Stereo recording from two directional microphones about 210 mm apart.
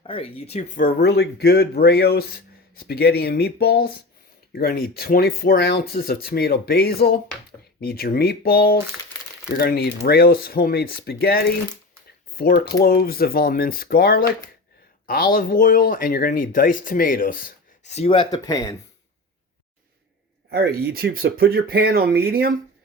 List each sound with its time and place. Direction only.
0.0 s speech: 25° left (ahead or behind)
0.9 s speech: 50° left (ahead or behind); by 18.8 s 15° left (ahead or behind)
20.5 s speech: 45° right (ahead or behind)